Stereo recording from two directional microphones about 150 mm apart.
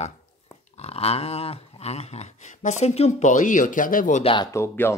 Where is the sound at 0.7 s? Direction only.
45° left (ahead or behind); by 4.2 s 65° left (ahead or behind).